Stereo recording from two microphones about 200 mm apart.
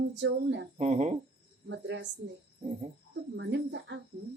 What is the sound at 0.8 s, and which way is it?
Speech, 35° right (ahead or behind).